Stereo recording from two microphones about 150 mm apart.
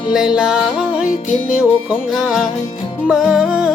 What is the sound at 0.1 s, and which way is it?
Music, 5° right (ahead or behind).